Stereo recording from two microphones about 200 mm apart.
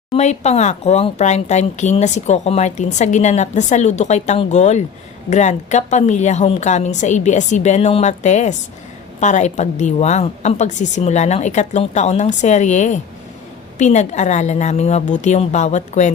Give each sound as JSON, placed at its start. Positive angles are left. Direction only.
{"t": 0.1, "sound": "speech", "side_deg": 35}